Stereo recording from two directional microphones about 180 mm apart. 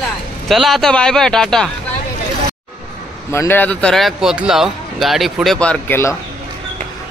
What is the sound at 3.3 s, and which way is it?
A man's voice, 15° left (ahead or behind).